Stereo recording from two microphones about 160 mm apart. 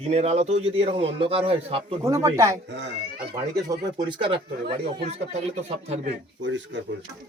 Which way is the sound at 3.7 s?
30° right (ahead or behind).